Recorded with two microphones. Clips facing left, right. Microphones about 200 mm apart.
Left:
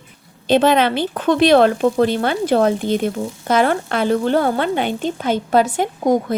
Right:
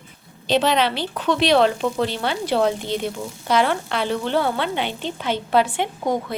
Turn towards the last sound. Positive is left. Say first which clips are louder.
# left 6 dB
turn(degrees=40)  # may be behind; listen again after turning